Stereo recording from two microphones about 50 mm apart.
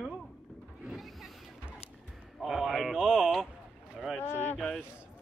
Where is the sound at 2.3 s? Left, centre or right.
Centre.